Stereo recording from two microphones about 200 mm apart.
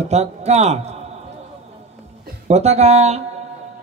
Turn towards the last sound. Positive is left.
turn(degrees=-35)  # may be behind; listen again after turning